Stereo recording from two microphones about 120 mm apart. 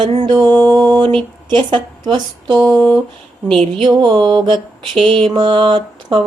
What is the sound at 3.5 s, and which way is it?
Speech, 45° right (ahead or behind).